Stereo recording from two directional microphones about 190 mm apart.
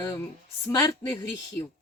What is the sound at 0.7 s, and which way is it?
Speech, 20° left (ahead or behind).